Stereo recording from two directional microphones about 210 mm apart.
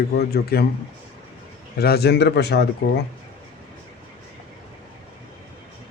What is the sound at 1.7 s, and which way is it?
Speech, 50° left (ahead or behind).